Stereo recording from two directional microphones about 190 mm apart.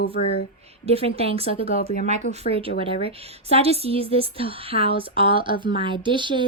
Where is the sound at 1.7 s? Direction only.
50° left (ahead or behind).